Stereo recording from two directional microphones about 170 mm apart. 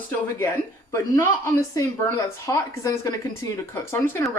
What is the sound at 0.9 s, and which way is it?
A woman's voice, 15° left (ahead or behind).